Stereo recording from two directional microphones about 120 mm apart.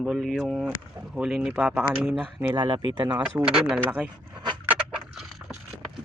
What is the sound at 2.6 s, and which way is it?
Speech, 40° right (ahead or behind).